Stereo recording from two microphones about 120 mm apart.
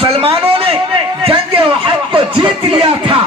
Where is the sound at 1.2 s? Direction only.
50° right (ahead or behind).